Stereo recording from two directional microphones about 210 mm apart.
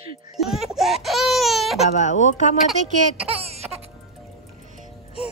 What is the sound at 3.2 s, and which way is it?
Laughter, 30° right (ahead or behind).